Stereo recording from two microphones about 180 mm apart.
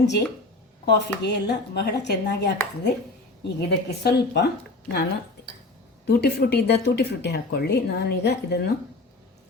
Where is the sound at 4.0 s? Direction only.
65° left (ahead or behind).